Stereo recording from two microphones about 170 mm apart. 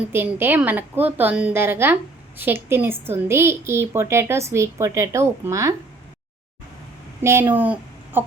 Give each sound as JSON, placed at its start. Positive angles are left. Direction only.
{"t": 0.1, "sound": "speech", "side_deg": -10}
{"t": 7.2, "sound": "a woman's voice", "side_deg": -15}